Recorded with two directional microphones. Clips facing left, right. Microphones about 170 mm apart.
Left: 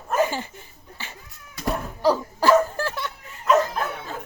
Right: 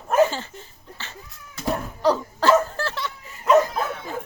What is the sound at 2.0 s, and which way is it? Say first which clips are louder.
Laughter: even; 10° left (ahead or behind).